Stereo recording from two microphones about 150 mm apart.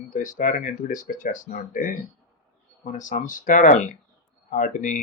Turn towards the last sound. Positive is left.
turn(degrees=55)  # may be behind; listen again after turning